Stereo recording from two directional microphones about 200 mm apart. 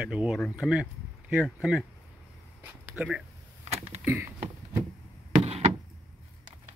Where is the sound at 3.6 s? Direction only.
30° right (ahead or behind).